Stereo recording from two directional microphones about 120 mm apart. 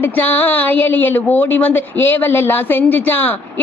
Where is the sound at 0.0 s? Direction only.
15° left (ahead or behind).